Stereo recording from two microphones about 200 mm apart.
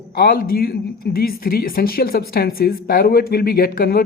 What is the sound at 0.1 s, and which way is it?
Speech, 50° left (ahead or behind).